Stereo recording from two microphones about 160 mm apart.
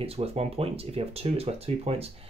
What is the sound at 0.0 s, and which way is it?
Speech, 40° right (ahead or behind).